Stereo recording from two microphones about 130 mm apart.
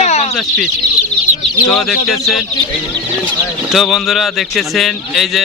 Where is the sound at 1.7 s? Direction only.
Centre (ahead or behind).